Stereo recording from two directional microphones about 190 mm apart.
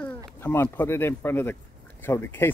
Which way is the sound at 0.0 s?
10° left (ahead or behind).